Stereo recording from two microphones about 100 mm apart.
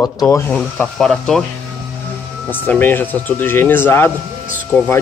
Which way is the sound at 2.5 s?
20° left (ahead or behind).